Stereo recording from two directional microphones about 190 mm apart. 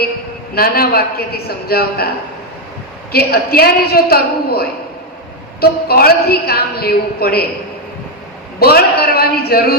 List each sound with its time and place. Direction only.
0.5 s a woman's voice: 55° left (ahead or behind)
3.1 s a man's voice: 55° left (ahead or behind)
8.5 s a woman's voice: 55° left (ahead or behind)